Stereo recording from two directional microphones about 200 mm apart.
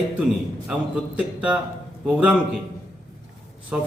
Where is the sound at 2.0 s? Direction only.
5° right (ahead or behind).